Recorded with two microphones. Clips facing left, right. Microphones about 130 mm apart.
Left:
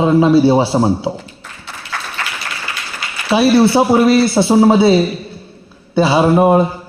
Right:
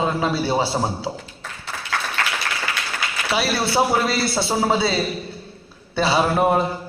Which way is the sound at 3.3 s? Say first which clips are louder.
Left 11 dB; 25° left (ahead or behind).